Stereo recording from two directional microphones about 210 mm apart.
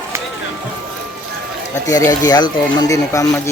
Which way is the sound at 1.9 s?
15° left (ahead or behind).